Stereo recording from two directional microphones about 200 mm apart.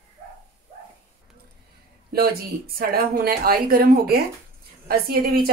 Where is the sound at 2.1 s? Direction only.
50° right (ahead or behind).